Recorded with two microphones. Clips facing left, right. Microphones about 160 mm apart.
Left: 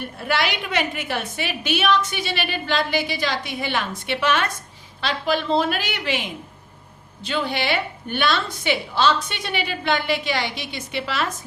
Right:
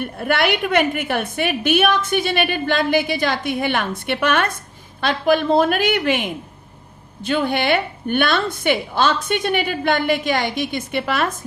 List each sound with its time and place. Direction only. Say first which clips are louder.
0.0 s a woman's voice: right 4 dB; 55° right (ahead or behind)